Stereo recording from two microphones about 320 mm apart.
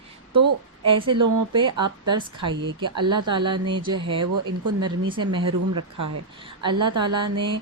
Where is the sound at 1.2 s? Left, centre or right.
Right.